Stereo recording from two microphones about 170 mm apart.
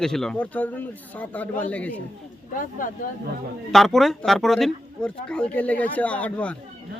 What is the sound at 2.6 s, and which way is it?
Speech, 50° left (ahead or behind).